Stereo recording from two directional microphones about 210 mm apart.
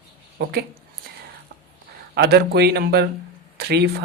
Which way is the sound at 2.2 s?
50° right (ahead or behind).